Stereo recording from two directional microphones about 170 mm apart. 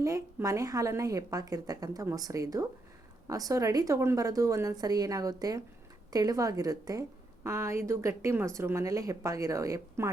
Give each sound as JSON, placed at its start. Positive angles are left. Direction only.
{"t": 0.0, "sound": "a woman's voice", "side_deg": -20}